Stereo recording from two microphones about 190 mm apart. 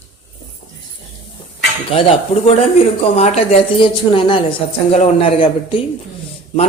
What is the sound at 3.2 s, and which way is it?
A woman's voice, 35° left (ahead or behind).